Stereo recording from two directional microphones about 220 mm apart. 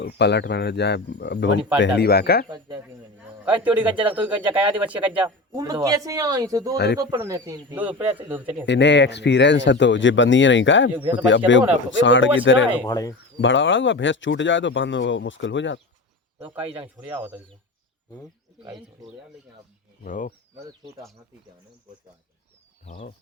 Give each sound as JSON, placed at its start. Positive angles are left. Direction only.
{"t": 0.0, "sound": "speech", "side_deg": 50}
{"t": 2.5, "sound": "a man's voice", "side_deg": -20}
{"t": 3.4, "sound": "a man's voice", "side_deg": -5}
{"t": 6.7, "sound": "speech", "side_deg": 50}
{"t": 7.0, "sound": "speech", "side_deg": -15}
{"t": 8.6, "sound": "speech", "side_deg": 55}
{"t": 12.8, "sound": "speech", "side_deg": 15}
{"t": 13.4, "sound": "speech", "side_deg": 55}
{"t": 16.8, "sound": "speech", "side_deg": -5}
{"t": 20.1, "sound": "speech", "side_deg": 40}
{"t": 22.9, "sound": "speech", "side_deg": 35}